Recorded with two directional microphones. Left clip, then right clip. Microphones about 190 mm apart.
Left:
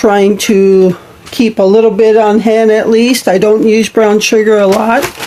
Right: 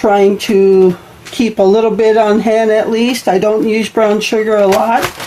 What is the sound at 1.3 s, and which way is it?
Speech, 30° left (ahead or behind).